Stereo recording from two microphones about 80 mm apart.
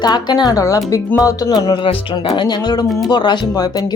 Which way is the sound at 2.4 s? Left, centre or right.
Left.